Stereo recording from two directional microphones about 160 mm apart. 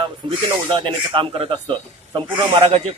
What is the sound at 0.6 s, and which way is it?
Speech, 30° right (ahead or behind).